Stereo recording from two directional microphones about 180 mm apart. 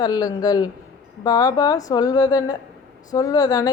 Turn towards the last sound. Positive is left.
turn(degrees=20)  # may be behind; listen again after turning